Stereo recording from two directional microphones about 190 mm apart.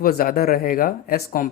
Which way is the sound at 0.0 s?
50° left (ahead or behind).